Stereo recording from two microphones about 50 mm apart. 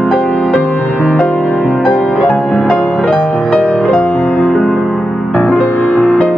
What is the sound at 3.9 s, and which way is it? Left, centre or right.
Music, left.